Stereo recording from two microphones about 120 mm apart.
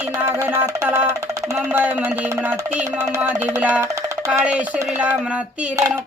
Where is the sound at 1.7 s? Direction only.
10° right (ahead or behind).